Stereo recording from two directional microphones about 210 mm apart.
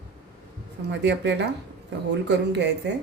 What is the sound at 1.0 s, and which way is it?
Speech, 55° right (ahead or behind).